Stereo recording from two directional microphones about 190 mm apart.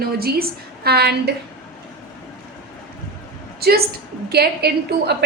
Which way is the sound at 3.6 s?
55° right (ahead or behind).